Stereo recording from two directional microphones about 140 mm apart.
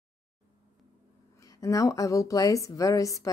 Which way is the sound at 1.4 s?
25° left (ahead or behind).